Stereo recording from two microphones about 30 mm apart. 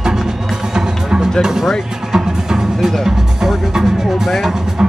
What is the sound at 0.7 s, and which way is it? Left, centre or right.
Music, right.